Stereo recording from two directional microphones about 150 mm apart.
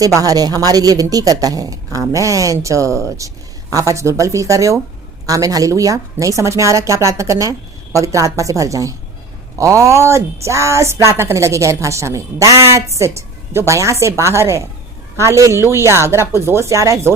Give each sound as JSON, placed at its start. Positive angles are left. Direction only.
{"t": 0.0, "sound": "speech", "side_deg": -25}